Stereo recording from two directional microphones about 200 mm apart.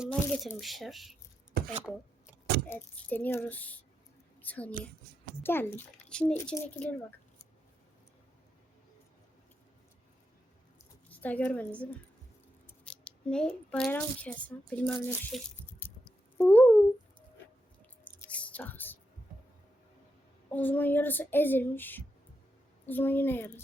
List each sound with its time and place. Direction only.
0.0 s speech: centre (ahead or behind)
1.6 s chopping: 50° right (ahead or behind)
2.6 s child singing: 10° left (ahead or behind)
11.1 s a woman's voice: 10° left (ahead or behind)
16.4 s child singing: 10° left (ahead or behind)
18.0 s squish: 10° left (ahead or behind)
20.5 s child singing: 10° left (ahead or behind)